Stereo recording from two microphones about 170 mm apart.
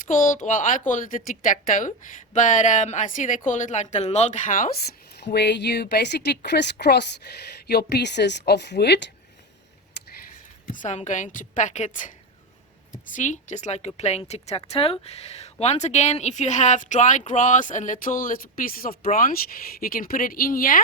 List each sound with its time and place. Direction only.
0.0 s speech: 50° left (ahead or behind)
5.1 s speech: 80° left
10.7 s speech: 45° left (ahead or behind)
13.1 s speech: 45° left (ahead or behind)